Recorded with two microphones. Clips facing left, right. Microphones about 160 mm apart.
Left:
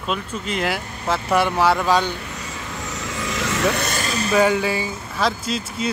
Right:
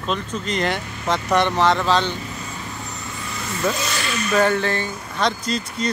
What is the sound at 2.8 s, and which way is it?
Vehicle, 90° left.